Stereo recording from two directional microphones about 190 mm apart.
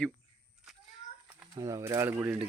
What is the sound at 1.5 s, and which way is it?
Speech, 20° right (ahead or behind).